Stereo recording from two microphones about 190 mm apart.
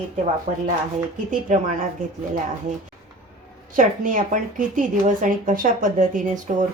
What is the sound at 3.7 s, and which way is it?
A woman's voice, 45° right (ahead or behind).